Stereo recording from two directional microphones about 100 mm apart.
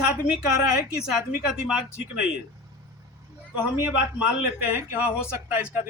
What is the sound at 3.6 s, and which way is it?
Speech, 15° right (ahead or behind).